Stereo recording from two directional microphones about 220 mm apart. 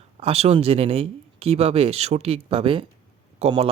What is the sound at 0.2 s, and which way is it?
Speech, 30° right (ahead or behind).